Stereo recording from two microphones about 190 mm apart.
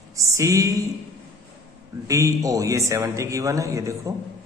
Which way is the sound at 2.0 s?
15° right (ahead or behind).